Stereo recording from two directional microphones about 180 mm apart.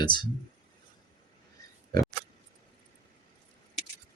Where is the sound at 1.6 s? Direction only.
20° left (ahead or behind).